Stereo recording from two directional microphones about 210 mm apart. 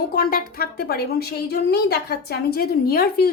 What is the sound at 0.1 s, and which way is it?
A woman's voice, 45° left (ahead or behind).